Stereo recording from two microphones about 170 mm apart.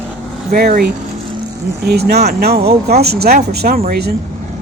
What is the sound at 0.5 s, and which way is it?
Speech, 60° right (ahead or behind).